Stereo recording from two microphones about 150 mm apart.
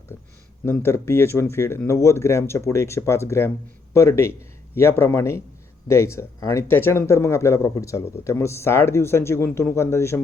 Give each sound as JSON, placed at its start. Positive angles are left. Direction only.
{"t": 0.6, "sound": "speech", "side_deg": 15}